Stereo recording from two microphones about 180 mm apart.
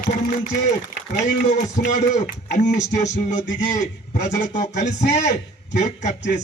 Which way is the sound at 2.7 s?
40° left (ahead or behind).